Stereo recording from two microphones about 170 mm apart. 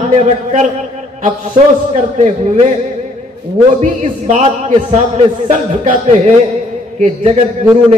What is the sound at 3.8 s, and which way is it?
A man's voice, 45° right (ahead or behind).